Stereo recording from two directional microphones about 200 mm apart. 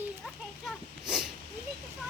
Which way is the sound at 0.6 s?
5° right (ahead or behind).